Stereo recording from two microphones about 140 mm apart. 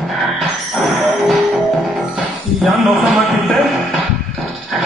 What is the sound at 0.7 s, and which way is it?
Music, centre (ahead or behind).